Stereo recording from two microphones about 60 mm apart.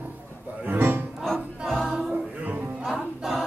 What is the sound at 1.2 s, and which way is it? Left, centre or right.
Music, centre.